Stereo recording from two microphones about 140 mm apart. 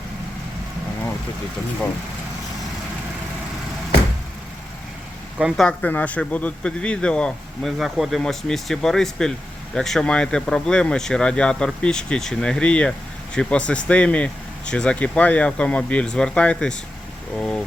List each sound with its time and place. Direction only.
5.4 s speech: 5° right (ahead or behind)
5.6 s speech: 10° left (ahead or behind)